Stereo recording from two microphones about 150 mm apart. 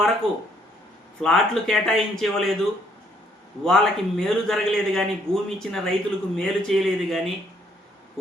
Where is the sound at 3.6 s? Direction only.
5° left (ahead or behind).